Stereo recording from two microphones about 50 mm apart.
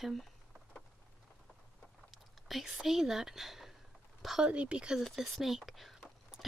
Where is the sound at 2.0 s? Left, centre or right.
Centre.